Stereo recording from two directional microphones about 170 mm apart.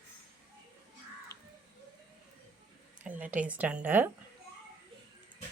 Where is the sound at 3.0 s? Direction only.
10° right (ahead or behind).